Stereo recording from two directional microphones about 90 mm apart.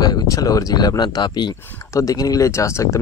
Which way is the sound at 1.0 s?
55° left (ahead or behind).